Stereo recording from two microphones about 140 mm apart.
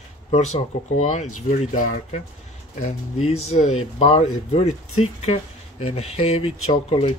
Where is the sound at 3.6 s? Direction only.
55° left (ahead or behind).